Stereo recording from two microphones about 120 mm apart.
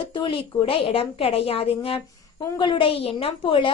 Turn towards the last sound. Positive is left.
turn(degrees=45)  # may be behind; listen again after turning